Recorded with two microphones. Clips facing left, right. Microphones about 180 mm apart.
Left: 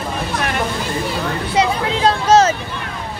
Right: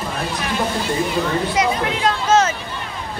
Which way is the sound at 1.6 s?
35° left (ahead or behind).